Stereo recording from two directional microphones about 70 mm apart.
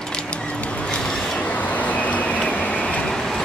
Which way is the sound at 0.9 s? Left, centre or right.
Centre.